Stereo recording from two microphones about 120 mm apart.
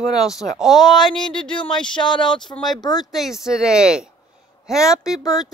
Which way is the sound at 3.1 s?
5° right (ahead or behind).